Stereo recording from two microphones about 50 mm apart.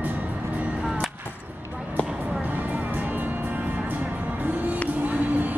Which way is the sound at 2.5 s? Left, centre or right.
Right.